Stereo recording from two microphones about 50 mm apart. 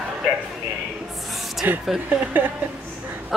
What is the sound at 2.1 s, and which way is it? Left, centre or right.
Speech, right.